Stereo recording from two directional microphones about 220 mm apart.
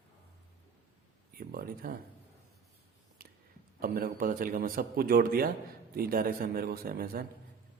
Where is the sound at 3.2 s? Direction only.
45° right (ahead or behind).